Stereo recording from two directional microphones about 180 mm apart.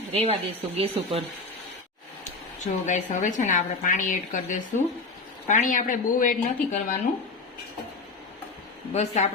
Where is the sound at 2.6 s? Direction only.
45° left (ahead or behind).